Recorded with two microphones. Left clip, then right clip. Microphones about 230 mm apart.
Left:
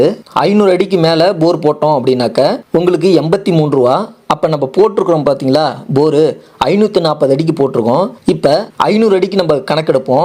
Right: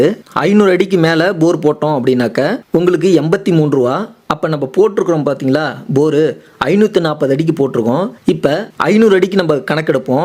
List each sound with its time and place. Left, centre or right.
0.0 s speech: right